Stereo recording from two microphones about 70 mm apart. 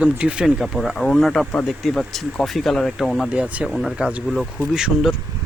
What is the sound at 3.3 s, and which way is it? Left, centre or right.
Speech, centre.